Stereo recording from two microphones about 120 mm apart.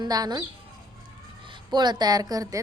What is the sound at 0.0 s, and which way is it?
Speech, 35° right (ahead or behind).